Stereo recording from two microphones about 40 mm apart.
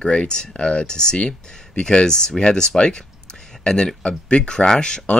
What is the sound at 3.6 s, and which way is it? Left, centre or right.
Speech, centre.